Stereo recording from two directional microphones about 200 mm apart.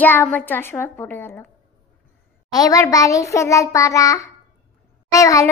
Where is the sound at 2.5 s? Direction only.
15° left (ahead or behind).